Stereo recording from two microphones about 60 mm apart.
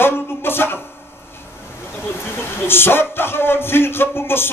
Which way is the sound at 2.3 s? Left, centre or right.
Left.